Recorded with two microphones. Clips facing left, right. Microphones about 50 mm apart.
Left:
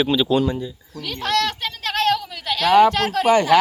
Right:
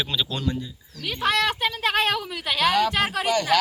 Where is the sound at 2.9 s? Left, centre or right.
Centre.